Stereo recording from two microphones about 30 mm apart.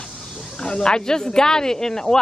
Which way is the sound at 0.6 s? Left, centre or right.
Left.